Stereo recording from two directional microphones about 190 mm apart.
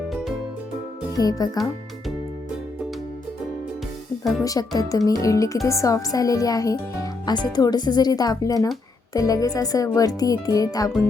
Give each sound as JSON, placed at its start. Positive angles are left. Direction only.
{"t": 1.1, "sound": "speech", "side_deg": 20}
{"t": 4.2, "sound": "speech", "side_deg": 0}
{"t": 4.4, "sound": "speech", "side_deg": 20}